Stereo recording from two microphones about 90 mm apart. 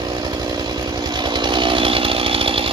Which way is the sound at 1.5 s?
65° right (ahead or behind).